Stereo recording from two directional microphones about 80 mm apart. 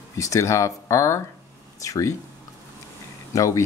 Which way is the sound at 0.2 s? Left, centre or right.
Left.